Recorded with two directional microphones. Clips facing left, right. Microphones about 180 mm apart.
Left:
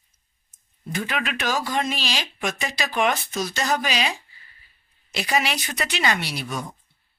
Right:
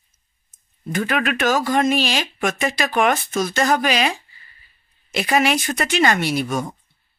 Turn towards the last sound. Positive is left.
turn(degrees=-50)  # may be behind; listen again after turning